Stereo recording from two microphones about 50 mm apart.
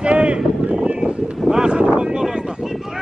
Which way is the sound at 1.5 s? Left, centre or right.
Centre.